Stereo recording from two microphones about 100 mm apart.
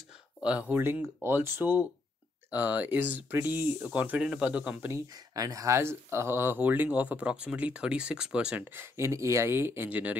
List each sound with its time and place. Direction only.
0.4 s speech: 15° right (ahead or behind)
5.3 s speech: 35° right (ahead or behind); by 8.6 s 10° right (ahead or behind)
8.7 s speech: 25° right (ahead or behind)